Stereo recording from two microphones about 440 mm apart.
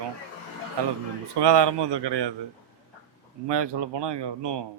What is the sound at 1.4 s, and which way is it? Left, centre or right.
Speech, right.